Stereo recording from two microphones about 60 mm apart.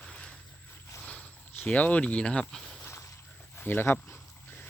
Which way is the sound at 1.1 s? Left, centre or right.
Left.